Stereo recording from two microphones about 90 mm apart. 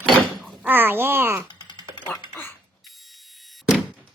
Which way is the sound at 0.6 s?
25° right (ahead or behind).